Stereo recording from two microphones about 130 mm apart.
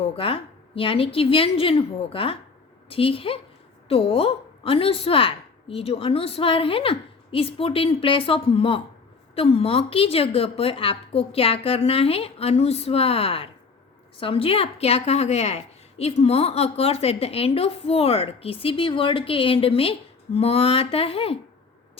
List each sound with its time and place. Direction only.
0.0 s a woman's voice: 45° left (ahead or behind)